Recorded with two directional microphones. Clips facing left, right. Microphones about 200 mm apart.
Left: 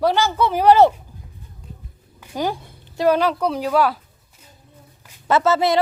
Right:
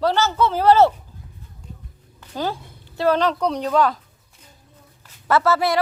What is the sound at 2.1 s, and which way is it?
A woman's voice, 15° left (ahead or behind).